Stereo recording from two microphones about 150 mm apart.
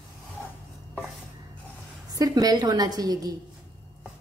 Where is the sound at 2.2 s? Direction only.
25° right (ahead or behind).